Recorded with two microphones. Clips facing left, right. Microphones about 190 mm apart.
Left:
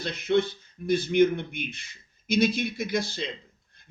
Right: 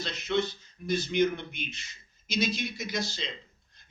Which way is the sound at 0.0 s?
55° left (ahead or behind).